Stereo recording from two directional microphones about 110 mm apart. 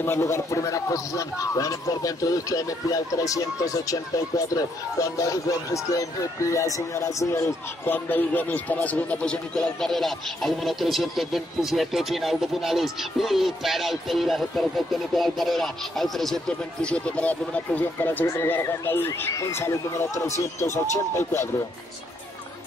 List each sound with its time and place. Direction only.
0.0 s a man's voice: 25° left (ahead or behind)
18.2 s speech: 25° left (ahead or behind)